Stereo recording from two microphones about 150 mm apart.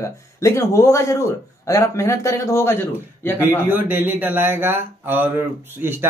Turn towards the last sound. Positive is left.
turn(degrees=-15)  # may be behind; listen again after turning